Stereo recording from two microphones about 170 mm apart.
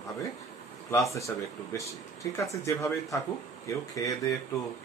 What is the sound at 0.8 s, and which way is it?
Speech, 20° left (ahead or behind).